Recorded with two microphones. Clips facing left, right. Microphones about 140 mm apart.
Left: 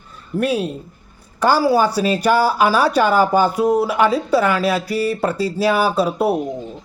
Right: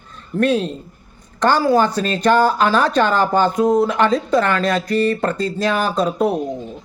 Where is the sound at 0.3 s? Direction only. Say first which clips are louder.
Right 2 dB; 10° left (ahead or behind).